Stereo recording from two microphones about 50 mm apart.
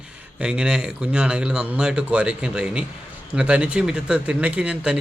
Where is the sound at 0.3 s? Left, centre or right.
Centre.